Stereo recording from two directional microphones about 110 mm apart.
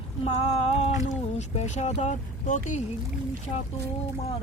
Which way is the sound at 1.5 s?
90° left.